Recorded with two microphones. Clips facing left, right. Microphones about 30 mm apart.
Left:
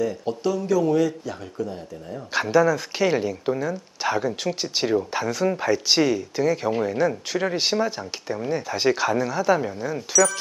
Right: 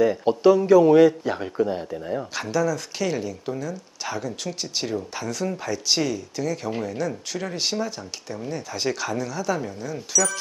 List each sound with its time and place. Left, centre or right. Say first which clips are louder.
0.0 s speech: right 7 dB; right
2.3 s speech: left 7 dB; centre